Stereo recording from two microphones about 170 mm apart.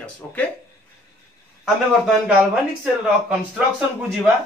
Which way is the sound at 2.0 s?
5° right (ahead or behind).